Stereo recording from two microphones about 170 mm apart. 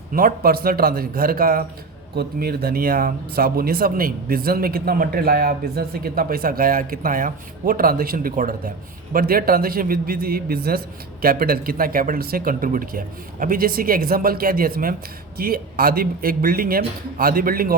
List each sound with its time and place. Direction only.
0.1 s speech: 55° right (ahead or behind)